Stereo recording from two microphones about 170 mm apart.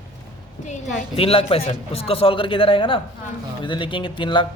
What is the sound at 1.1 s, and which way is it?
A man's voice, 35° left (ahead or behind).